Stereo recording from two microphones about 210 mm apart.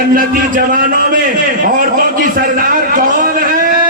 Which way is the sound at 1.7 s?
40° right (ahead or behind).